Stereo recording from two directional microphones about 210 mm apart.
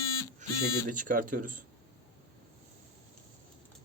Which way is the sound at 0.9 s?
40° right (ahead or behind).